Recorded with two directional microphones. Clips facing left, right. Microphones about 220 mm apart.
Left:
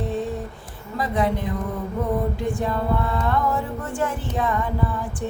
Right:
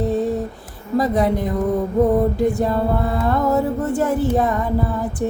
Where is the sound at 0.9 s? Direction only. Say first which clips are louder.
Right 6 dB; 40° right (ahead or behind).